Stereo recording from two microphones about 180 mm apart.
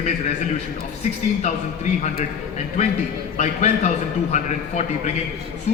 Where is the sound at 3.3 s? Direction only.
40° left (ahead or behind).